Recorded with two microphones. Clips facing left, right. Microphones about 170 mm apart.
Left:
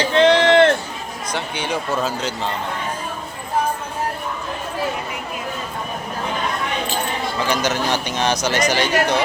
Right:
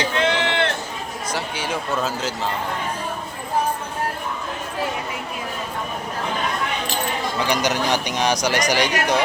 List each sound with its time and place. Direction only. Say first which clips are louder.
0.1 s a sound: left 8 dB; 35° left (ahead or behind)
1.3 s a man's voice: left 2 dB; 5° right (ahead or behind)
7.3 s speech: left 1 dB; 15° right (ahead or behind)